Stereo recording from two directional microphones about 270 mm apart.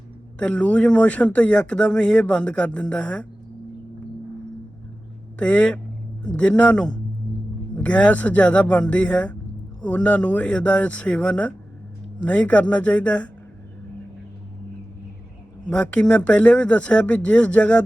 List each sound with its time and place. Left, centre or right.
0.3 s speech: centre
5.4 s speech: centre
15.7 s speech: centre